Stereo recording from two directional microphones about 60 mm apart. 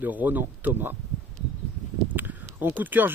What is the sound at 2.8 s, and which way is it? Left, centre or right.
Speech, right.